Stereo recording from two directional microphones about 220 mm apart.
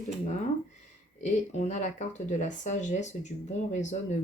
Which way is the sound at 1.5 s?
30° left (ahead or behind).